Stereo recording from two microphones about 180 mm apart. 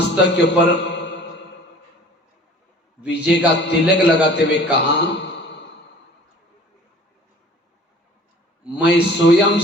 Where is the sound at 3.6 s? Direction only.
75° left (ahead or behind).